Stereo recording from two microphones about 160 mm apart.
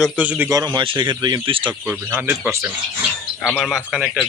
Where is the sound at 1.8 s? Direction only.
10° right (ahead or behind).